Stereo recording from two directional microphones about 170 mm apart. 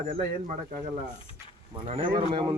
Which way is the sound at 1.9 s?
30° right (ahead or behind).